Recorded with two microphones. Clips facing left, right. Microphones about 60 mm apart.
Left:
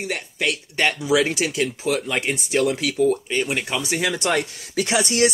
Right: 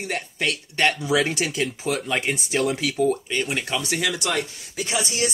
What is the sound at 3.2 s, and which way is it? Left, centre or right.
Speech, centre.